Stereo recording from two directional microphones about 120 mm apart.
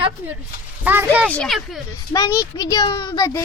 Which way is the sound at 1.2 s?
10° left (ahead or behind).